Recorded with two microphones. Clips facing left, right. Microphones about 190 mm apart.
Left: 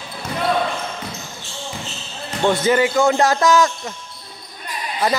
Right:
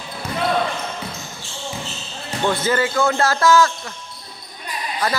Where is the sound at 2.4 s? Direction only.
15° left (ahead or behind).